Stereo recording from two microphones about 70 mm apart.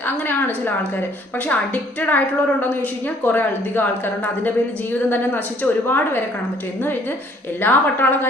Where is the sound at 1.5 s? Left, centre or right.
Left.